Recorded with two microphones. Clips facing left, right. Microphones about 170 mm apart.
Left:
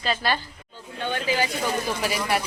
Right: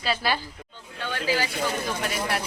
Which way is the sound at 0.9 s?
20° left (ahead or behind).